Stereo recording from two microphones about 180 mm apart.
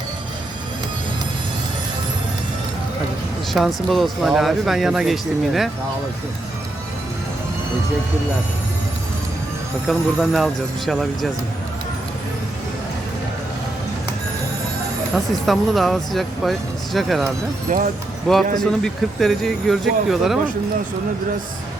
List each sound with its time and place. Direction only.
3.8 s speech: centre (ahead or behind)
9.8 s speech: centre (ahead or behind)
15.1 s speech: centre (ahead or behind)
17.7 s speech: 50° right (ahead or behind)
18.3 s speech: 5° left (ahead or behind)